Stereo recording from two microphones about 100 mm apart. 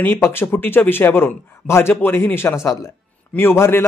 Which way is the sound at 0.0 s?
25° left (ahead or behind).